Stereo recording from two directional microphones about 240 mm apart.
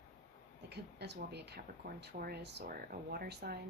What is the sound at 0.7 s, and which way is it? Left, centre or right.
Speech, right.